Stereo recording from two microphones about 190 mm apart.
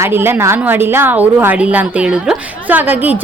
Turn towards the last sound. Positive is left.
turn(degrees=-10)  # may be behind; listen again after turning